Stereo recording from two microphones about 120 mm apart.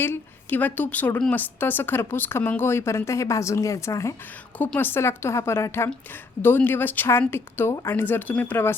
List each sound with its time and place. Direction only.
0.0 s a woman's voice: 15° left (ahead or behind)